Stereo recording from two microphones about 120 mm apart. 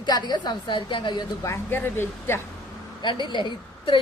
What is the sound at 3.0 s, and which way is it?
A woman's voice, 40° left (ahead or behind).